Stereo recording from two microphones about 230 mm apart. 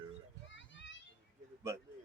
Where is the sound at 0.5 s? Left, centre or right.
Left.